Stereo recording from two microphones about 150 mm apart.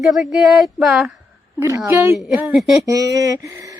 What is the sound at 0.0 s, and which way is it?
Speech, centre (ahead or behind).